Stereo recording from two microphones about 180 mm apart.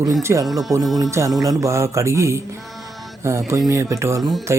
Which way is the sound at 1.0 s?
15° right (ahead or behind).